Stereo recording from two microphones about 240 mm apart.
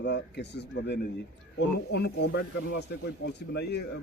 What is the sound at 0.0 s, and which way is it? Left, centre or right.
Speech, left.